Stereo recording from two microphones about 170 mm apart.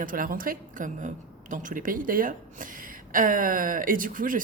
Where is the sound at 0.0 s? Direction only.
55° right (ahead or behind).